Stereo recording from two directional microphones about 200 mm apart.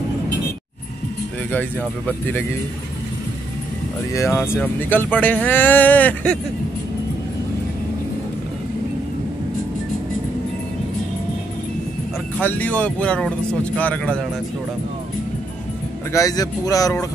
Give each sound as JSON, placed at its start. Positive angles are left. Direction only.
{"t": 2.0, "sound": "speech", "side_deg": 10}
{"t": 4.1, "sound": "speech", "side_deg": 15}
{"t": 12.4, "sound": "speech", "side_deg": 10}
{"t": 16.1, "sound": "speech", "side_deg": 15}